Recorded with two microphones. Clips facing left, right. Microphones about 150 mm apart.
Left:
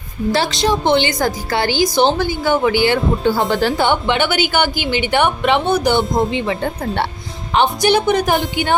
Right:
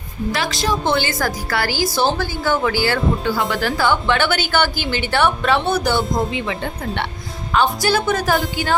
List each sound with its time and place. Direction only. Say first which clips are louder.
0.3 s a woman's voice: left 5 dB; 30° left (ahead or behind)
6.5 s speech: left 4 dB; 40° left (ahead or behind)
7.5 s a woman's voice: left 3 dB; 20° left (ahead or behind)